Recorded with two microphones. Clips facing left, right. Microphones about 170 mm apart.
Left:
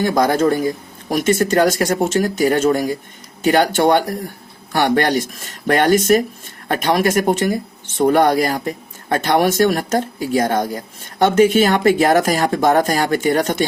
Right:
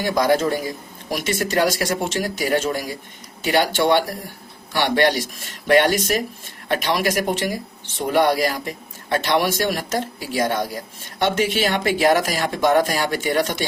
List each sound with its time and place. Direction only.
0.2 s speech: 45° left (ahead or behind)